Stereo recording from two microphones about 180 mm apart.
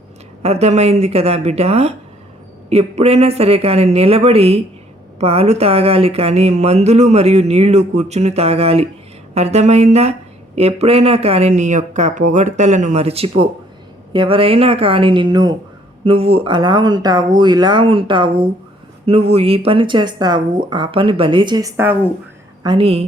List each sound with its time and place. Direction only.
0.4 s speech: 35° right (ahead or behind)